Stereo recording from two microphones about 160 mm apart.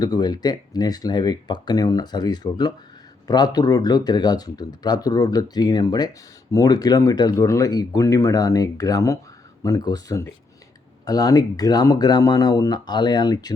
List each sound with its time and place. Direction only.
0.0 s speech: 25° left (ahead or behind)